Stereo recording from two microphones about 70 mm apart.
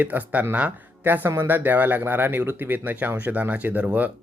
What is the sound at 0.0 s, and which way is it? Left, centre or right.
Speech, right.